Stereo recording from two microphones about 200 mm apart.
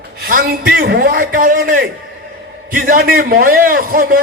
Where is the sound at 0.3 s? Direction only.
45° right (ahead or behind).